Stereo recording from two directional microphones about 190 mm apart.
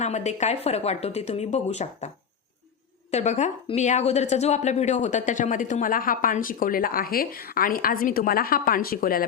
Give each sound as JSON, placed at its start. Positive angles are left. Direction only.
{"t": 0.0, "sound": "a woman's voice", "side_deg": 35}
{"t": 3.1, "sound": "a woman's voice", "side_deg": 35}